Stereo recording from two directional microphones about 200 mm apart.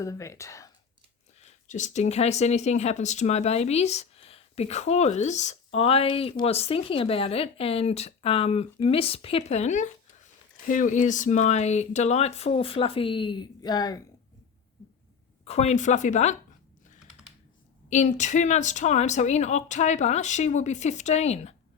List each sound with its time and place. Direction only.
0.0 s speech: 15° left (ahead or behind)
1.4 s speech: 35° left (ahead or behind); by 14.0 s 20° left (ahead or behind)
15.4 s speech: 35° left (ahead or behind)
17.8 s speech: 35° left (ahead or behind)